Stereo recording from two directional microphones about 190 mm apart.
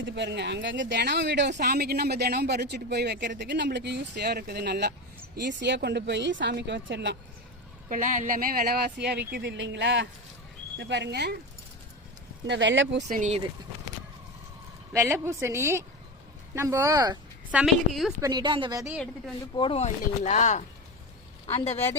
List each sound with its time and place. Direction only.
0.0 s speech: 65° right (ahead or behind)
7.9 s speech: 45° right (ahead or behind); by 11.3 s 60° right (ahead or behind)
12.5 s speech: 75° right (ahead or behind)
13.1 s speech: 40° right (ahead or behind)
14.9 s a woman's voice: 15° right (ahead or behind)
17.5 s a woman's voice: 5° right (ahead or behind)
18.2 s a woman's voice: 20° right (ahead or behind)
18.9 s a woman's voice: centre (ahead or behind)
19.5 s speech: 30° left (ahead or behind)